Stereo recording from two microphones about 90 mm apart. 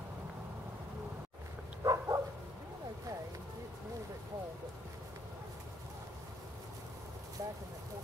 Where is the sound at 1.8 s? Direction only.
40° right (ahead or behind).